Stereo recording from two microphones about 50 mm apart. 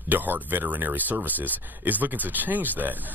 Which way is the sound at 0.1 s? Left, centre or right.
Right.